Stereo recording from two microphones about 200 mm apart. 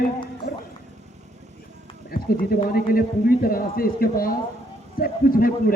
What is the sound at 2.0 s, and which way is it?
Speech, 45° left (ahead or behind).